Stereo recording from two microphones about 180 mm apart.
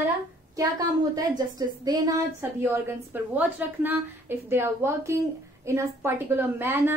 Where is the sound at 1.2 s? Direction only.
20° right (ahead or behind).